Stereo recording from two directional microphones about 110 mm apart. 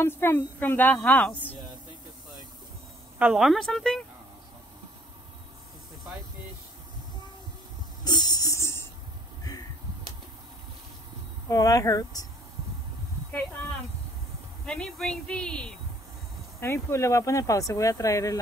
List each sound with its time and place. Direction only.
0.0 s speech: 20° left (ahead or behind)
3.2 s speech: 10° right (ahead or behind)
8.0 s a sound: 40° left (ahead or behind)
11.4 s speech: 30° left (ahead or behind)
14.7 s speech: 5° left (ahead or behind)
16.5 s speech: 25° left (ahead or behind)